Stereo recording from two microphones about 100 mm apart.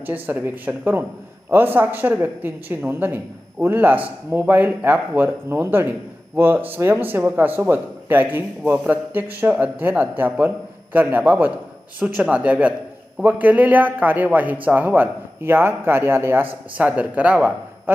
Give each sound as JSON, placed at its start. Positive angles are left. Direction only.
{"t": 0.0, "sound": "a man's voice", "side_deg": -15}